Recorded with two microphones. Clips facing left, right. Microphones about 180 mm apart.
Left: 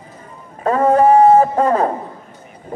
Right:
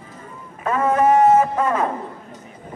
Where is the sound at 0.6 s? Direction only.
35° left (ahead or behind).